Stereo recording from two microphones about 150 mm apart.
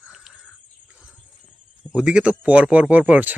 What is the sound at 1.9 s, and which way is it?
Speech, 5° right (ahead or behind).